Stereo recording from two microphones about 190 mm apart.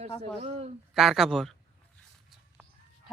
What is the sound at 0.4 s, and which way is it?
Speech, 35° right (ahead or behind).